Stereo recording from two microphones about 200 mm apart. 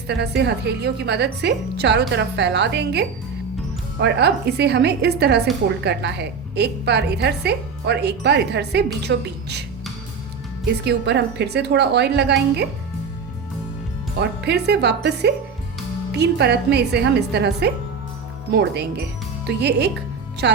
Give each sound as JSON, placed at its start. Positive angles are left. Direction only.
{"t": 0.1, "sound": "a woman's voice", "side_deg": -55}
{"t": 10.8, "sound": "a woman's voice", "side_deg": -60}
{"t": 14.2, "sound": "a woman's voice", "side_deg": -55}